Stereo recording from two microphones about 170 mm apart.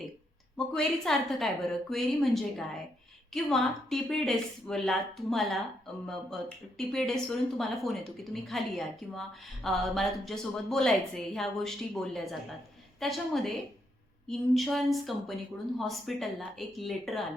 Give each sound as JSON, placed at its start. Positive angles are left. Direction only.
{"t": 0.5, "sound": "a woman's voice", "side_deg": 5}